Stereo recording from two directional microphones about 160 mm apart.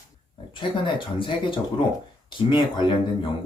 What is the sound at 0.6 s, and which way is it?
Speech, 30° left (ahead or behind).